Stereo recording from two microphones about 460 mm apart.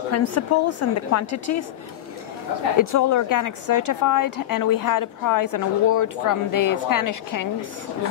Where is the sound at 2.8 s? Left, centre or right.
Left.